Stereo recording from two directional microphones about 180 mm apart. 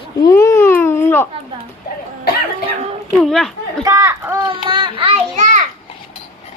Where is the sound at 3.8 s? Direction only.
15° right (ahead or behind).